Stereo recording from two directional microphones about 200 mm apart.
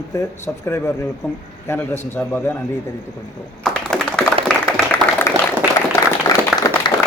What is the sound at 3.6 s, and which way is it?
Computer keyboard, 5° left (ahead or behind).